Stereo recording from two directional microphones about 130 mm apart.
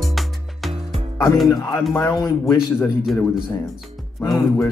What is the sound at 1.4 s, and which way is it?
Music, 25° left (ahead or behind).